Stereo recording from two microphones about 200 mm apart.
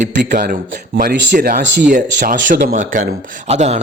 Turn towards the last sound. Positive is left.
turn(degrees=-30)  # may be behind; listen again after turning